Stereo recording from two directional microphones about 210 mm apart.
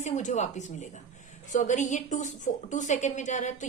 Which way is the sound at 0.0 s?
35° left (ahead or behind).